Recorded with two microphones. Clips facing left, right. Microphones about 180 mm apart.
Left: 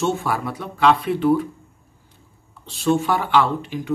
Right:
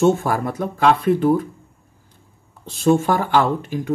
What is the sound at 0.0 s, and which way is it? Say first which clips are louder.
Speech: right 5 dB; 45° right (ahead or behind).